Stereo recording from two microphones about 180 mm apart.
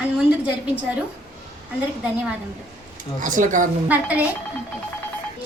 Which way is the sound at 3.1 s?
45° right (ahead or behind).